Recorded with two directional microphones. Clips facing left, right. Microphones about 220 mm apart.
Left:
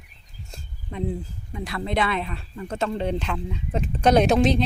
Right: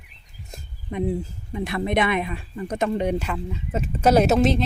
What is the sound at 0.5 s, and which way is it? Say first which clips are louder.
Speech: right 5 dB; 20° right (ahead or behind).